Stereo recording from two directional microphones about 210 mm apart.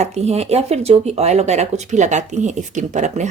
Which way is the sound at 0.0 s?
30° right (ahead or behind).